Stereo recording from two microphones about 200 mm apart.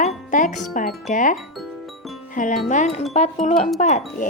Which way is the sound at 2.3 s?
40° left (ahead or behind).